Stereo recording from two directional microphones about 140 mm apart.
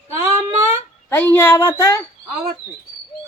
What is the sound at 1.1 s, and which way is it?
Speech, 15° left (ahead or behind).